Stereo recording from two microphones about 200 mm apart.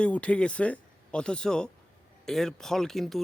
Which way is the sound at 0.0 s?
5° left (ahead or behind).